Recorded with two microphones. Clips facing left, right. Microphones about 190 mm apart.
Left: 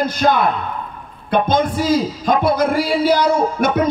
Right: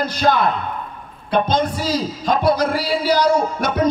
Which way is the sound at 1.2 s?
50° left (ahead or behind).